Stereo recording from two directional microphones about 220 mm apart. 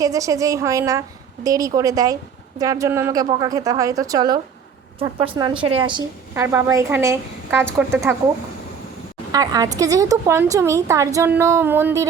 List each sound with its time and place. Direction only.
0.0 s a woman's voice: 15° right (ahead or behind)
6.3 s a woman's voice: 10° right (ahead or behind)
9.3 s a woman's voice: 15° right (ahead or behind)